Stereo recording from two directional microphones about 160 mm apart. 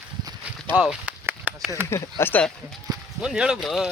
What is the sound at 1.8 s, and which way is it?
Speech, 15° left (ahead or behind).